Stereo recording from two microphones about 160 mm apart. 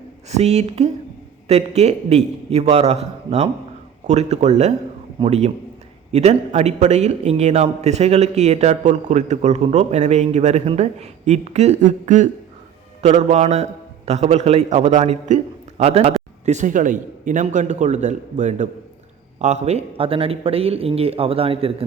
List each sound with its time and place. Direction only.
0.3 s a man's voice: 45° right (ahead or behind)